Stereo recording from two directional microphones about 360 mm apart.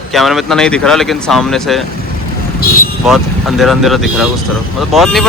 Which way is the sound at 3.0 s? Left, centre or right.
Centre.